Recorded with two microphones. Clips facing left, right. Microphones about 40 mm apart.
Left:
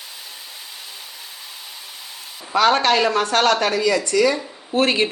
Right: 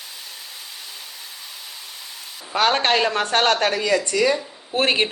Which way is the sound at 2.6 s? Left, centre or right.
Right.